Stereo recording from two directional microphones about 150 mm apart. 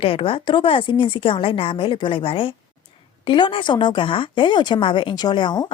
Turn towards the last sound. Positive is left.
turn(degrees=30)  # may be behind; listen again after turning